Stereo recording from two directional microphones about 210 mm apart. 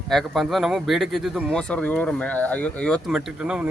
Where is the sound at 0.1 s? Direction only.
Centre (ahead or behind).